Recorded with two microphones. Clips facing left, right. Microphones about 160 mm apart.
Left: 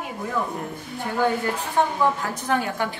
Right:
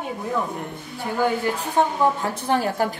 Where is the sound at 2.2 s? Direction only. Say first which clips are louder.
Right 2 dB; 30° right (ahead or behind).